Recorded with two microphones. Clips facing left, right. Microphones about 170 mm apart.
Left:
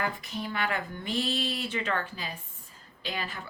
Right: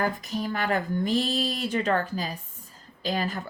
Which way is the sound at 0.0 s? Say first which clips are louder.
Right 5 dB; 40° right (ahead or behind).